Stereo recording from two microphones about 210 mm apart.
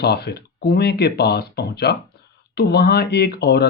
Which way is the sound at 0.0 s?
50° left (ahead or behind).